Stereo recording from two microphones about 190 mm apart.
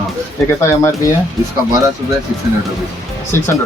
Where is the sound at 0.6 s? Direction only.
15° left (ahead or behind).